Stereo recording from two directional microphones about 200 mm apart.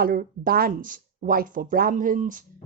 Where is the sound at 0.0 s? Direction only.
45° right (ahead or behind).